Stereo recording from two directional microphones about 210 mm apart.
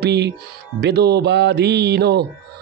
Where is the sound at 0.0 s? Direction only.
55° right (ahead or behind).